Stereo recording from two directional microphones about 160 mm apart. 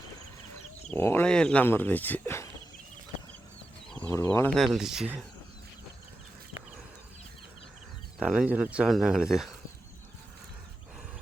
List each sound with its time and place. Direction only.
0.9 s speech: 15° left (ahead or behind)
3.8 s chicken: 5° left (ahead or behind)
4.1 s speech: 20° left (ahead or behind)
4.6 s speech: centre (ahead or behind)
8.2 s speech: 5° right (ahead or behind)